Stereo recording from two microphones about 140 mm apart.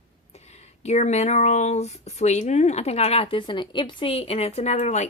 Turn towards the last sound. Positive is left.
turn(degrees=55)  # may be behind; listen again after turning